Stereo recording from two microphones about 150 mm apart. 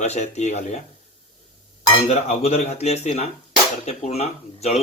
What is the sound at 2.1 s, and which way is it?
Speech, 45° left (ahead or behind).